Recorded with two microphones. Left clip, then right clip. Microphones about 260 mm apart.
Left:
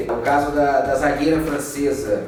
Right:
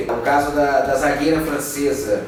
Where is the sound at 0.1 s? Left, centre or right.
Centre.